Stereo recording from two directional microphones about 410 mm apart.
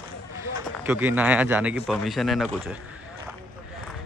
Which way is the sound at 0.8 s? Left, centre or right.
Centre.